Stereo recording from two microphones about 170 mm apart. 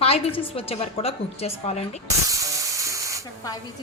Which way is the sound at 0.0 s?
35° left (ahead or behind).